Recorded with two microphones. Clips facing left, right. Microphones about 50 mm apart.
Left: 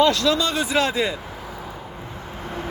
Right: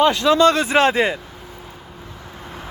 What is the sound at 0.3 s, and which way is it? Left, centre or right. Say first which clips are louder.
Speech: right 7 dB; right.